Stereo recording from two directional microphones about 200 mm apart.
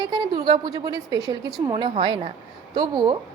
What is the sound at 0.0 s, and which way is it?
A woman's voice, 20° right (ahead or behind).